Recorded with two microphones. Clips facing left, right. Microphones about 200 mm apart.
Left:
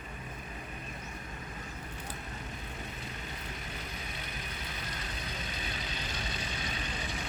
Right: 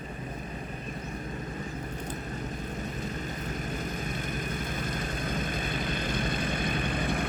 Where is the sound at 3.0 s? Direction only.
45° right (ahead or behind).